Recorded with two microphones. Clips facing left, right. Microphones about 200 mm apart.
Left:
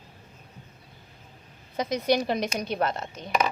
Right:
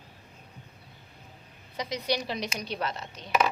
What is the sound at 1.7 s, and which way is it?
A woman's voice, 50° left (ahead or behind).